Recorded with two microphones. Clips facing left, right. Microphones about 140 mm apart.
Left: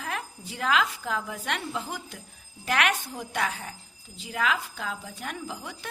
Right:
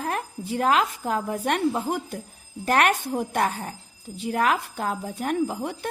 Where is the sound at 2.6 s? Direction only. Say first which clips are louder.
Right 5 dB; 45° right (ahead or behind).